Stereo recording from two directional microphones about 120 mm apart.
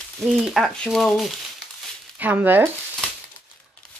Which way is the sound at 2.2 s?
15° right (ahead or behind).